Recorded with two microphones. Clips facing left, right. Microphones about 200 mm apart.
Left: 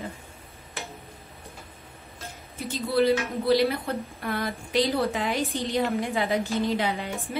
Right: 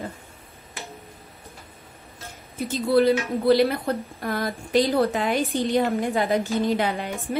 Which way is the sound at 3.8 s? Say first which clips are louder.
Right 4 dB; 40° right (ahead or behind).